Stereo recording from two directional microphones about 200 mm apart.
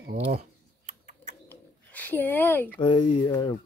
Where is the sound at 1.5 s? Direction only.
10° left (ahead or behind).